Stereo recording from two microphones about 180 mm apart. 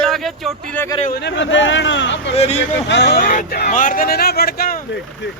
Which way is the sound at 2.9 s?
70° left (ahead or behind).